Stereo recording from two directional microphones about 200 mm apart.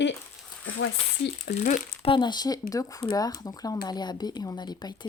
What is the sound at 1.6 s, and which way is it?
Speech, 40° left (ahead or behind).